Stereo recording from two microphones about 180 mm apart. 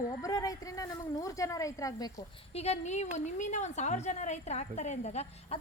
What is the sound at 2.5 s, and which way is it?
A woman's voice, 35° left (ahead or behind).